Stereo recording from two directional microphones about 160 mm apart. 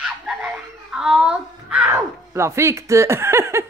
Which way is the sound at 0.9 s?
5° right (ahead or behind).